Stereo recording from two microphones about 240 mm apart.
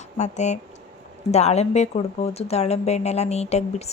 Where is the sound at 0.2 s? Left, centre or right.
Left.